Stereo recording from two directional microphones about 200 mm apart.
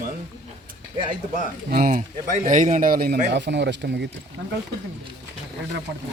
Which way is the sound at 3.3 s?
60° right (ahead or behind).